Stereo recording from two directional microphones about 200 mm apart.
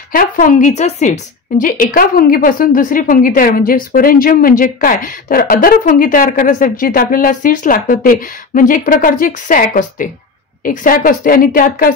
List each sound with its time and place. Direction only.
0.1 s a woman's voice: 45° left (ahead or behind)